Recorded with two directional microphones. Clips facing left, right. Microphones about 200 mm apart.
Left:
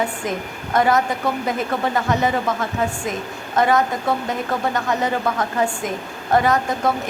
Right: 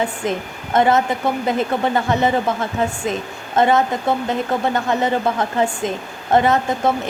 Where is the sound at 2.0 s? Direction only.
25° right (ahead or behind).